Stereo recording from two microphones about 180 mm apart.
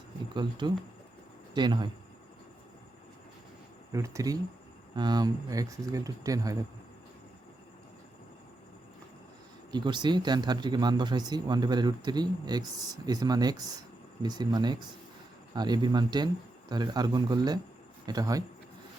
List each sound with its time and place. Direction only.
0.3 s speech: 25° right (ahead or behind)
3.9 s speech: 15° right (ahead or behind)
9.7 s speech: 25° right (ahead or behind)